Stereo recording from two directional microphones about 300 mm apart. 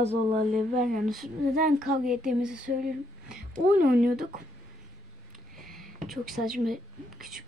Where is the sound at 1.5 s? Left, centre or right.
Right.